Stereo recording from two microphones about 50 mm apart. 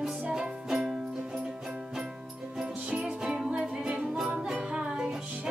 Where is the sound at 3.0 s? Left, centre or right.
Centre.